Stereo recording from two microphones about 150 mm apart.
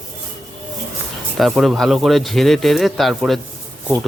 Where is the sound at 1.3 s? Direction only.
Centre (ahead or behind).